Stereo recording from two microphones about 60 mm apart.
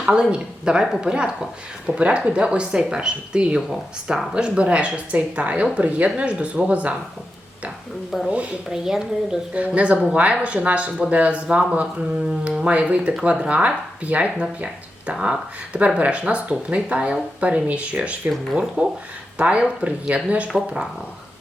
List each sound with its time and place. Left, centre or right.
0.0 s speech: centre
8.7 s speech: centre
9.6 s speech: right